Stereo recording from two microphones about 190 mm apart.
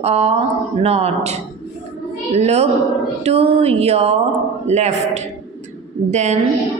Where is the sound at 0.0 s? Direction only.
35° right (ahead or behind).